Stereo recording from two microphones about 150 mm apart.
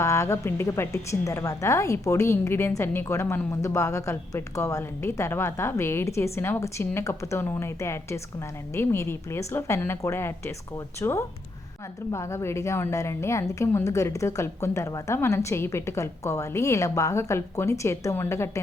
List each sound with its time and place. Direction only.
0.0 s a woman's voice: 20° left (ahead or behind)